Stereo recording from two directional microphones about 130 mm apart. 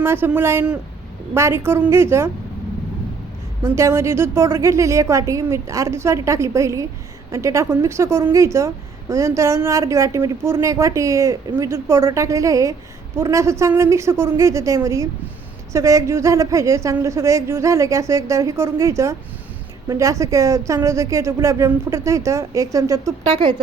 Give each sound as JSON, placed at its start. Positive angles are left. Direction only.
{"t": 0.0, "sound": "a woman's voice", "side_deg": -15}
{"t": 3.6, "sound": "a woman's voice", "side_deg": -20}